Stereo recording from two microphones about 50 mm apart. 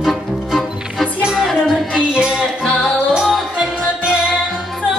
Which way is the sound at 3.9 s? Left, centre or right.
Centre.